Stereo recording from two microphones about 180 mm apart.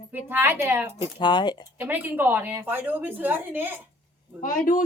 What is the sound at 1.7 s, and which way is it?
A woman's voice, 10° right (ahead or behind).